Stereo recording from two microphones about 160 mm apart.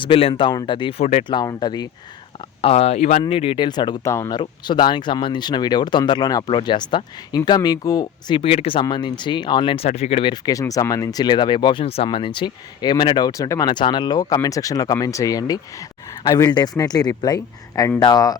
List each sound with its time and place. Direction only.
0.0 s speech: 35° left (ahead or behind)
2.6 s speech: 40° left (ahead or behind)